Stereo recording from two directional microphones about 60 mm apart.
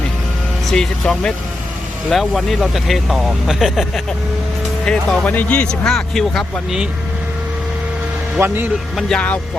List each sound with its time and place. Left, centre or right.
0.7 s speech: centre
2.0 s speech: centre
4.9 s speech: centre
5.8 s speech: centre
8.4 s a man's voice: right